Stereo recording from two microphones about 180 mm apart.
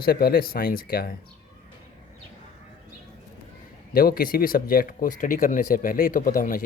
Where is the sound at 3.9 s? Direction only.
55° left (ahead or behind).